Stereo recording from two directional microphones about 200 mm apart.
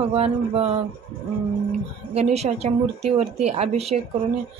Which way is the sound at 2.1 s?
30° right (ahead or behind).